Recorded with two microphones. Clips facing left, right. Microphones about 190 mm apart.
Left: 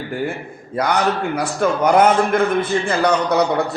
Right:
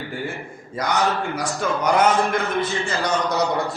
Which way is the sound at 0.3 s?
60° left (ahead or behind).